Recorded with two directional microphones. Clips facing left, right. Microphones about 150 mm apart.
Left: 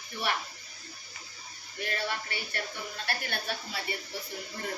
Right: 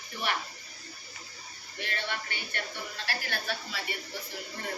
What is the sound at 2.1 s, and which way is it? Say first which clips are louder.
A woman's voice: left 2 dB; 40° left (ahead or behind).